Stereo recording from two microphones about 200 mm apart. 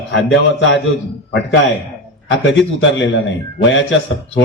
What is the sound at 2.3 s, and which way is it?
A man's voice, 65° left (ahead or behind).